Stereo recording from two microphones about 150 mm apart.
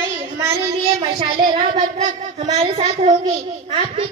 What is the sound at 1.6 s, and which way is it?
Child singing, 45° right (ahead or behind).